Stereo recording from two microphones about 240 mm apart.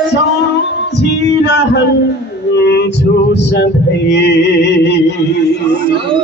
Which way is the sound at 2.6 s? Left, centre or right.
Left.